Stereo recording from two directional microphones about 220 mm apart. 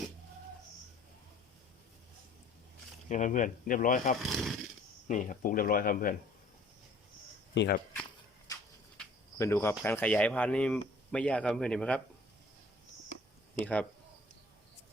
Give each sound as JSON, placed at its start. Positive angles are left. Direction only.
{"t": 3.1, "sound": "speech", "side_deg": 35}
{"t": 4.2, "sound": "speech", "side_deg": 0}
{"t": 5.0, "sound": "speech", "side_deg": 35}
{"t": 7.5, "sound": "speech", "side_deg": 55}
{"t": 8.5, "sound": "a sound", "side_deg": 15}
{"t": 9.4, "sound": "speech", "side_deg": 10}
{"t": 13.6, "sound": "speech", "side_deg": 5}